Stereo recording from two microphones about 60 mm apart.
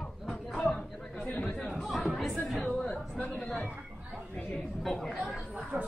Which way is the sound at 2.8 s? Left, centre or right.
Left.